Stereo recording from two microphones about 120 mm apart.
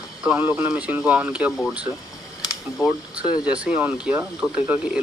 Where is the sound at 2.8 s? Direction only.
30° left (ahead or behind).